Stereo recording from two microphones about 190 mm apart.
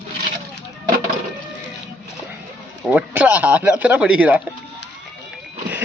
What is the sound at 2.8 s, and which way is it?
Speech, 5° right (ahead or behind).